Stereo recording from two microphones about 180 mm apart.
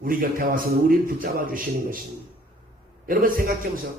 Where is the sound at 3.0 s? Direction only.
50° right (ahead or behind).